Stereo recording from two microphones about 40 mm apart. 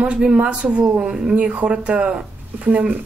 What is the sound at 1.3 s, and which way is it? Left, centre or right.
Speech, right.